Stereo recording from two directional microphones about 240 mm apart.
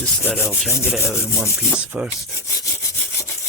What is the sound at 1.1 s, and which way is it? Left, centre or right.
Speech, centre.